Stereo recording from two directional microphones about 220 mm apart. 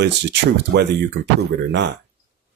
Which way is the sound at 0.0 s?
50° right (ahead or behind).